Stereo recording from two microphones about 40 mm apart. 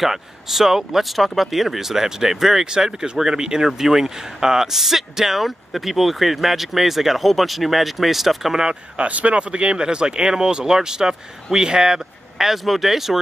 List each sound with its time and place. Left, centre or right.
0.0 s speech: centre
8.9 s speech: right; by 13.2 s centre